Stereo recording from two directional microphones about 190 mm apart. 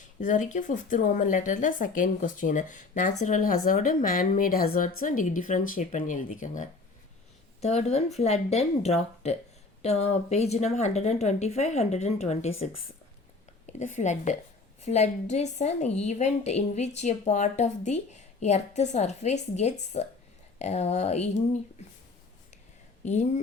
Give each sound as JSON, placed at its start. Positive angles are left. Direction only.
{"t": 0.2, "sound": "a woman's voice", "side_deg": 40}
{"t": 13.7, "sound": "a woman's voice", "side_deg": 40}
{"t": 23.0, "sound": "a woman's voice", "side_deg": 40}